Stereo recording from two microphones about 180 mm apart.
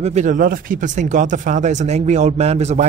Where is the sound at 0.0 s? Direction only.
40° right (ahead or behind).